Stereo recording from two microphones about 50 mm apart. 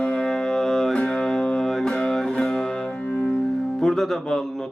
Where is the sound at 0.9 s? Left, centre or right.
Centre.